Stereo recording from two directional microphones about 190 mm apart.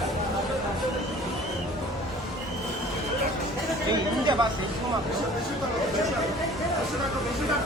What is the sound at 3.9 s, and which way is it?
Speech, 25° right (ahead or behind).